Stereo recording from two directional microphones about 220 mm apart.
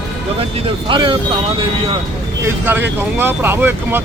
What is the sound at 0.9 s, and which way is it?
Speech, 20° right (ahead or behind).